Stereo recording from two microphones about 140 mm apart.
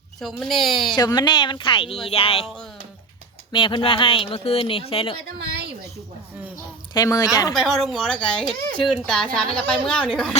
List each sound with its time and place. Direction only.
0.2 s a woman's voice: centre (ahead or behind)
0.9 s speech: 30° left (ahead or behind)
3.5 s speech: 35° left (ahead or behind)
6.9 s a woman's voice: 25° left (ahead or behind)
7.5 s a woman's voice: centre (ahead or behind)